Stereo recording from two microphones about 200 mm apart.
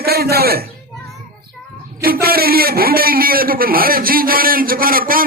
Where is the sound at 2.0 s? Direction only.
50° right (ahead or behind).